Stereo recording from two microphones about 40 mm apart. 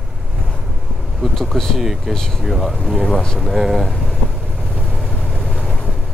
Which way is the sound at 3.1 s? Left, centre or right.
Centre.